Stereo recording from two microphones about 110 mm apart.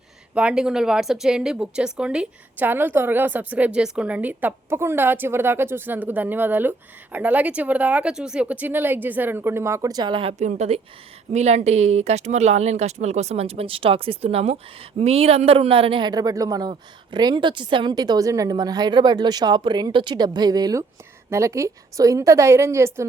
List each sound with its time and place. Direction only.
0.3 s speech: 10° right (ahead or behind); by 10.3 s 45° right (ahead or behind)
10.3 s a woman's voice: 90° right; by 23.0 s 25° right (ahead or behind)